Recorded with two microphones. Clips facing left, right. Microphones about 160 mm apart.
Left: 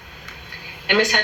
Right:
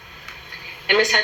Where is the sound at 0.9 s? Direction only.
Centre (ahead or behind).